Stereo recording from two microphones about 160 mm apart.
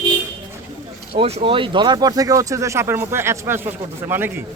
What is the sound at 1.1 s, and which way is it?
Speech, 35° right (ahead or behind).